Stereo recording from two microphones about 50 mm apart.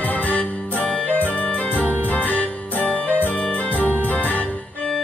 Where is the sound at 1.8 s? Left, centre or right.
Right.